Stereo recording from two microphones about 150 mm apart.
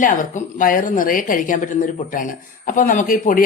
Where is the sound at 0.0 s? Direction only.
60° left (ahead or behind).